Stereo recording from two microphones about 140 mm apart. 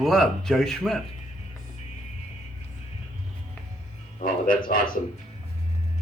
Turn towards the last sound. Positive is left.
turn(degrees=75)  # may be behind; listen again after turning